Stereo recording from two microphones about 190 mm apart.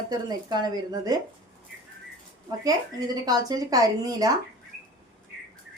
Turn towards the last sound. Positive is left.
turn(degrees=-20)  # may be behind; listen again after turning